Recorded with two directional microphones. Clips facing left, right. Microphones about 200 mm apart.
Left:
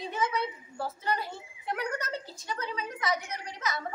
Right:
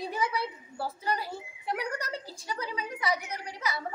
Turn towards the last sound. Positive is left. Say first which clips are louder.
# even
turn(degrees=-10)  # may be behind; listen again after turning